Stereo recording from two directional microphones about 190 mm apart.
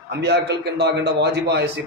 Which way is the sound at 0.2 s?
60° right (ahead or behind).